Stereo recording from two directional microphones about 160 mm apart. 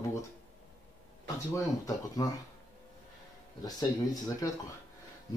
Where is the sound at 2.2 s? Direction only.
20° left (ahead or behind).